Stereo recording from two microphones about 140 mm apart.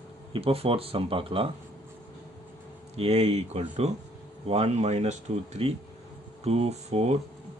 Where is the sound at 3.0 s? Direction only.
50° right (ahead or behind).